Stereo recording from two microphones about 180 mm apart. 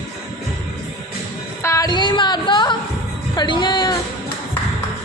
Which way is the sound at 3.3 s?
25° left (ahead or behind).